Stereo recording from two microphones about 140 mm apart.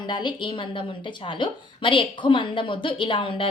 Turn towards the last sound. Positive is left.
turn(degrees=40)  # may be behind; listen again after turning